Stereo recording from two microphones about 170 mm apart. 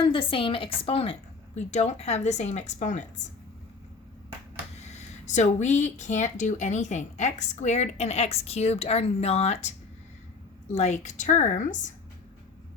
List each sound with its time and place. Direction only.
0.0 s a woman's voice: 30° left (ahead or behind)
4.8 s a woman's voice: 40° left (ahead or behind)